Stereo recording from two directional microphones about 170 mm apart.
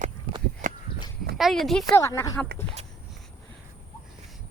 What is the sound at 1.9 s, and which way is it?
Speech, 15° left (ahead or behind).